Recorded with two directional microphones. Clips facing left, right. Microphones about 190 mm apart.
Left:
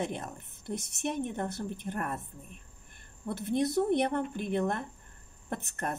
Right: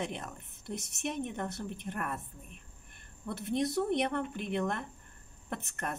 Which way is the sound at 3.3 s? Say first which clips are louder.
Left 3 dB; 40° left (ahead or behind).